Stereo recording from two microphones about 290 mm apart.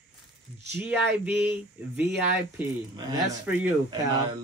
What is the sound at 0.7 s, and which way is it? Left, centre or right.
Speech, centre.